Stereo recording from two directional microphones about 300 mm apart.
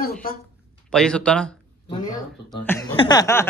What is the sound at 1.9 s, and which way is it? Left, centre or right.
A man's voice, centre.